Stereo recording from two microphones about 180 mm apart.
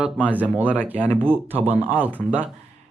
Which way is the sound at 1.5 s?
35° right (ahead or behind).